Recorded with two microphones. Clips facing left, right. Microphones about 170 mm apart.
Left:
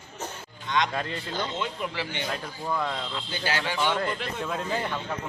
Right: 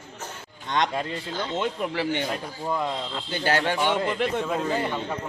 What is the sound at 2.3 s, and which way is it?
Speech, 15° right (ahead or behind).